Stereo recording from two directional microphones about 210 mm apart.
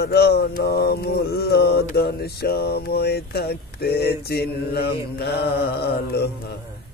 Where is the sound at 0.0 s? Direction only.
50° left (ahead or behind).